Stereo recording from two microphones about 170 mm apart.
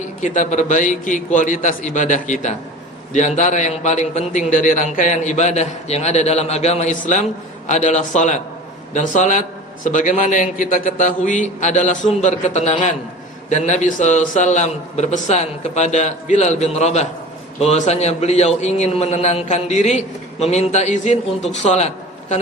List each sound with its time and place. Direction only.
0.2 s a man's voice: 45° left (ahead or behind)